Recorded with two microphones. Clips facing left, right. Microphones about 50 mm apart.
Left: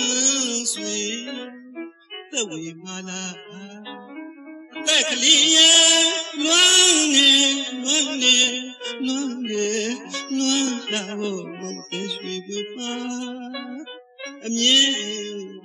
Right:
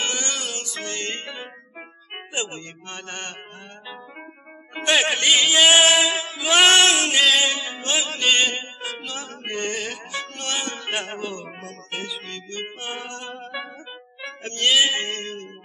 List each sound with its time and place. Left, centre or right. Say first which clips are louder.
0.0 s music: left 2 dB; centre
0.6 s music: left 2 dB; right
4.7 s music: right 2 dB; right
6.5 s music: right 3 dB; right
8.1 s mantra: even; centre
8.4 s music: right 1 dB; right
8.8 s music: left 5 dB; centre
9.1 s music: left 6 dB; right
9.8 s mantra: left 5 dB; centre
10.1 s music: left 6 dB; centre
14.7 s mantra: right 1 dB; centre
15.0 s music: even; right